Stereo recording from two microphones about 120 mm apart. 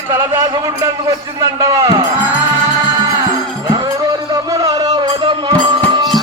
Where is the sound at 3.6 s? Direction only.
35° right (ahead or behind).